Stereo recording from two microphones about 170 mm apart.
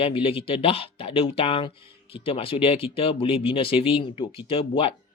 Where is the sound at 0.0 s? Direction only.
35° left (ahead or behind).